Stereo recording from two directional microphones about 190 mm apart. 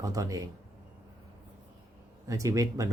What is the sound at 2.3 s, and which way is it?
Speech, 15° right (ahead or behind).